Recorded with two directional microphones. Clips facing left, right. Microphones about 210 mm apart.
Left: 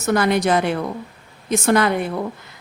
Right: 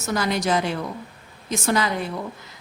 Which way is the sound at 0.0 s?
60° left (ahead or behind).